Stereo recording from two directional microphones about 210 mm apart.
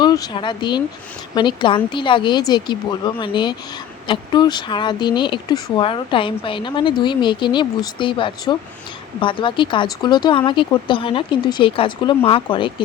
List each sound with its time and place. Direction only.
0.0 s a woman's voice: 20° left (ahead or behind)